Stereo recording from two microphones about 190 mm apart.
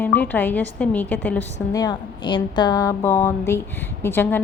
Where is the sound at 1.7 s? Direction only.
20° left (ahead or behind).